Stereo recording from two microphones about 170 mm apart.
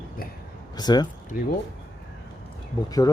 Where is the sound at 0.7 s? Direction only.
25° left (ahead or behind).